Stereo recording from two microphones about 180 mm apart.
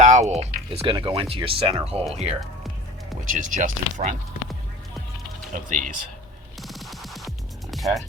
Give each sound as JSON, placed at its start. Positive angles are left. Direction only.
{"t": 0.0, "sound": "speech", "side_deg": -40}
{"t": 3.3, "sound": "speech", "side_deg": -45}
{"t": 5.5, "sound": "speech", "side_deg": -45}
{"t": 6.6, "sound": "music", "side_deg": 0}